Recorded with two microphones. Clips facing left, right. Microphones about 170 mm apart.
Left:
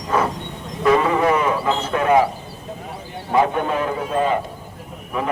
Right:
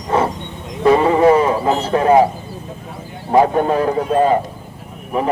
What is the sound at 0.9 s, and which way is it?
Speech, 30° right (ahead or behind).